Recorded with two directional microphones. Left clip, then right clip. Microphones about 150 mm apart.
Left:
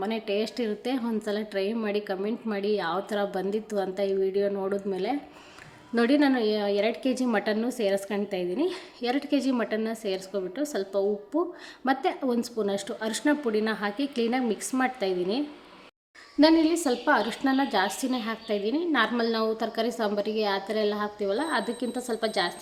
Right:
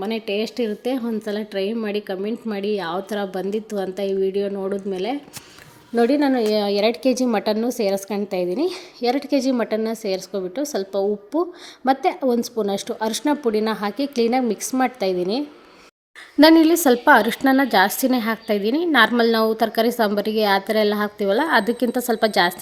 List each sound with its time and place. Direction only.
0.0 s a woman's voice: 25° right (ahead or behind)
16.4 s a woman's voice: 50° right (ahead or behind)